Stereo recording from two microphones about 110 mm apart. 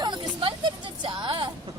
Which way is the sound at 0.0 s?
45° right (ahead or behind).